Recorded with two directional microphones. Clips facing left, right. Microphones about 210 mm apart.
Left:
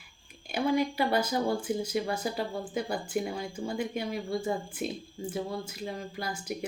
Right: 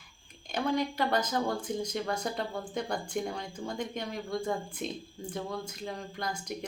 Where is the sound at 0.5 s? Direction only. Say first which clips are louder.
Left 3 dB; 10° left (ahead or behind).